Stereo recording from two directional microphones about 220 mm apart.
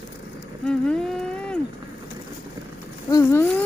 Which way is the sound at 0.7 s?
Centre (ahead or behind).